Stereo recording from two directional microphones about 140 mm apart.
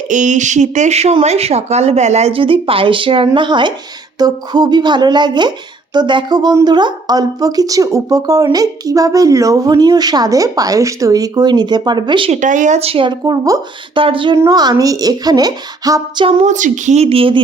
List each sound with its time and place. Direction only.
0.1 s a woman's voice: 60° right (ahead or behind); by 12.3 s 35° right (ahead or behind)
12.3 s speech: 65° right (ahead or behind); by 13.6 s 25° right (ahead or behind)
13.9 s speech: 40° right (ahead or behind)
14.3 s a woman's voice: 25° right (ahead or behind)
16.2 s speech: 55° right (ahead or behind); by 17.4 s 40° right (ahead or behind)